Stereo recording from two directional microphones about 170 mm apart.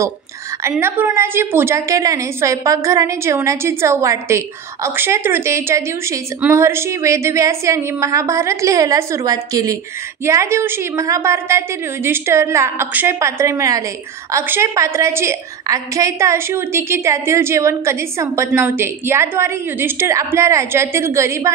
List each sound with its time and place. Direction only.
0.7 s a woman's voice: 15° right (ahead or behind)